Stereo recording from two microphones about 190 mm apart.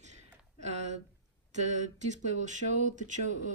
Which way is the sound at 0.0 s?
35° right (ahead or behind).